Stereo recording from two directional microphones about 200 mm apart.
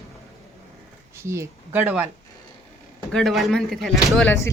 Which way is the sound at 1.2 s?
15° right (ahead or behind).